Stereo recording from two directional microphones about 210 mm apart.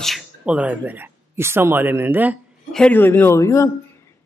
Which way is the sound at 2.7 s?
5° left (ahead or behind).